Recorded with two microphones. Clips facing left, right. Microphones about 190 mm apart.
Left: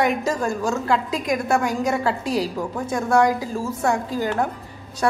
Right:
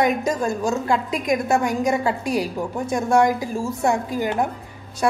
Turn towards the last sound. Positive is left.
turn(degrees=-15)  # may be behind; listen again after turning